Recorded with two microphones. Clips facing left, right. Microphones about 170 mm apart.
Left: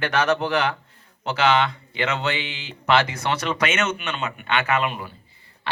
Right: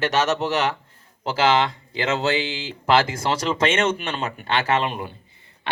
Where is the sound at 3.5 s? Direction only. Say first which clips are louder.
Right 3 dB; 30° right (ahead or behind).